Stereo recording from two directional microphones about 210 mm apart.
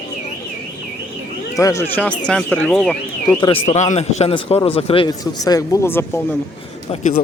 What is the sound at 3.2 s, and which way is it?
A man's voice, 25° left (ahead or behind).